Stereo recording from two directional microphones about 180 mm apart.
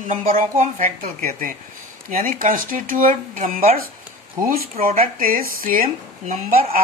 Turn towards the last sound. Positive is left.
turn(degrees=-50)  # may be behind; listen again after turning